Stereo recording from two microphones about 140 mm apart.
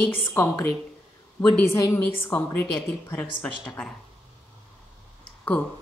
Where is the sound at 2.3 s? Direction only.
15° left (ahead or behind).